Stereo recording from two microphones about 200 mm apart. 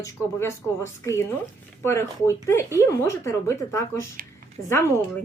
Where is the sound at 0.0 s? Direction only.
15° left (ahead or behind).